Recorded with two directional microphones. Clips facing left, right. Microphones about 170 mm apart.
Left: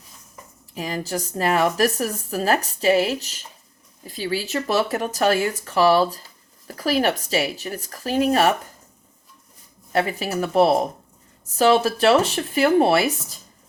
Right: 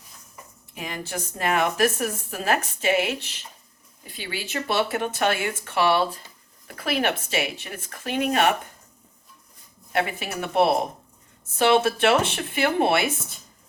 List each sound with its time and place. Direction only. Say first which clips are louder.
0.7 s a woman's voice: left 6 dB; 35° left (ahead or behind)
9.9 s a woman's voice: left 4 dB; 35° left (ahead or behind)